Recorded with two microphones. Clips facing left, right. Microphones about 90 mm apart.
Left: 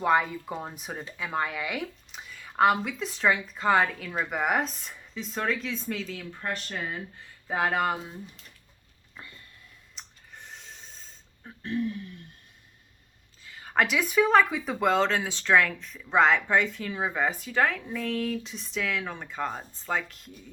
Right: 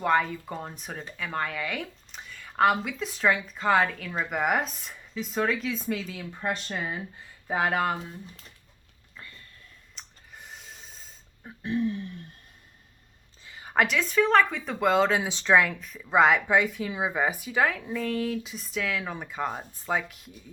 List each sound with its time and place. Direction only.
0.0 s speech: 5° left (ahead or behind)
6.5 s speech: 20° right (ahead or behind)
7.4 s speech: 5° right (ahead or behind)
9.9 s a sound: 5° right (ahead or behind)
11.4 s speech: 15° right (ahead or behind)
13.4 s a sound: 20° right (ahead or behind)
13.7 s speech: 5° left (ahead or behind)